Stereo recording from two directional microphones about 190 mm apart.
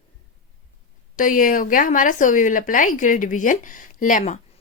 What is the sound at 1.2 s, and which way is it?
A woman's voice, 45° left (ahead or behind).